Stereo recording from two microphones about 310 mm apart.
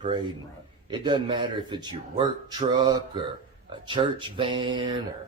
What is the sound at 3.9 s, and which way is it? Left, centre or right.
Speech, centre.